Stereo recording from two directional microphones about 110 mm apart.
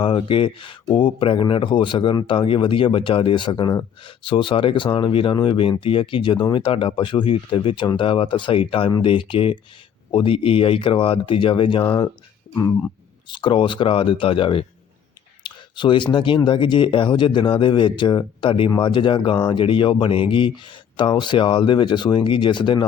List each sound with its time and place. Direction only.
0.0 s speech: 50° left (ahead or behind)
13.2 s speech: 45° left (ahead or behind)
15.4 s clicking: 45° left (ahead or behind)
16.1 s speech: 50° left (ahead or behind)